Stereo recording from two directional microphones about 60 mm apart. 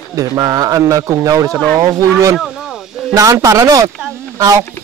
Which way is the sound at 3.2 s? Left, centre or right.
Right.